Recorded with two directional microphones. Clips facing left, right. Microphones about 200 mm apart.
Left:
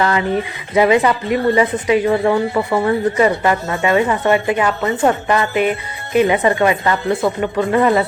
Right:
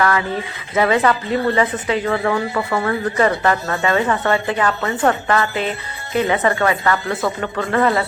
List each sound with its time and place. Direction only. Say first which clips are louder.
0.0 s speech: left 2 dB; 20° left (ahead or behind)